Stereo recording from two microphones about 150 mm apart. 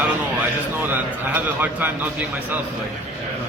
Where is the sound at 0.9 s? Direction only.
10° right (ahead or behind).